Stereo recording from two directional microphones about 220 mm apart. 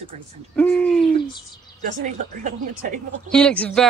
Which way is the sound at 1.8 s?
35° right (ahead or behind).